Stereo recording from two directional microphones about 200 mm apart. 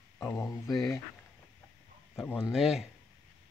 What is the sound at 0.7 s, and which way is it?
Speech, centre (ahead or behind).